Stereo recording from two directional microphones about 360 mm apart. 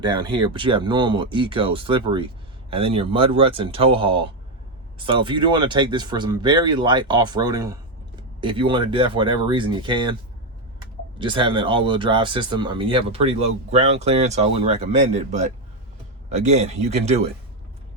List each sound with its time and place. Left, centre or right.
0.0 s speech: centre
11.2 s speech: centre